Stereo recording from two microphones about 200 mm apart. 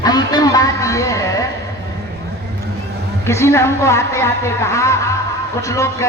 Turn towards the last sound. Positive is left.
turn(degrees=15)  # may be behind; listen again after turning